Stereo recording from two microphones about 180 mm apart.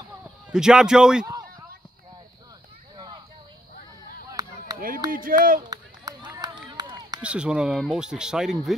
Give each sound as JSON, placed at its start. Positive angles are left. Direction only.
{"t": 0.2, "sound": "a man's voice", "side_deg": -5}
{"t": 4.4, "sound": "chop", "side_deg": -20}
{"t": 4.7, "sound": "a sound", "side_deg": -50}
{"t": 5.1, "sound": "speech", "side_deg": -50}
{"t": 6.3, "sound": "run", "side_deg": -25}
{"t": 7.2, "sound": "speech", "side_deg": -5}